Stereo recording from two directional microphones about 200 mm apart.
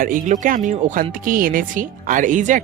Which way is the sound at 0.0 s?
40° right (ahead or behind).